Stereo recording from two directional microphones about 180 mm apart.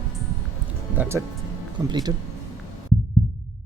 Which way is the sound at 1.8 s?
20° right (ahead or behind).